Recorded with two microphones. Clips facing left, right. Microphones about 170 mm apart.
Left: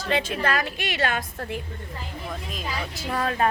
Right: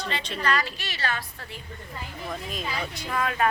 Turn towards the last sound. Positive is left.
turn(degrees=30)  # may be behind; listen again after turning